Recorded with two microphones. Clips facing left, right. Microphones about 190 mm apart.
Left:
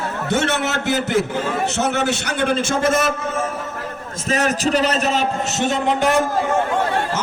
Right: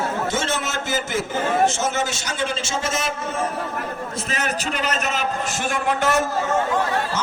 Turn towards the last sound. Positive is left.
turn(degrees=15)  # may be behind; listen again after turning